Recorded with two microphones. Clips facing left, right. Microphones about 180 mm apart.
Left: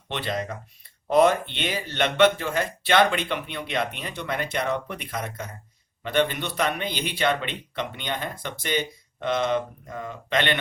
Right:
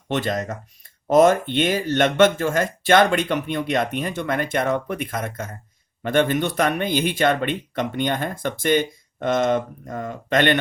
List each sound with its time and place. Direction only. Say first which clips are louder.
0.1 s speech: right 5 dB; 45° right (ahead or behind)